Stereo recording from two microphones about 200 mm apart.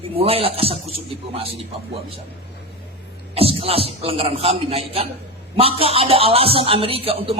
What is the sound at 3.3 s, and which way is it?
A man's voice, 30° right (ahead or behind).